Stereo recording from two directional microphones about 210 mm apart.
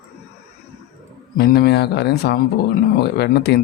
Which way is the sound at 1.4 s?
50° left (ahead or behind).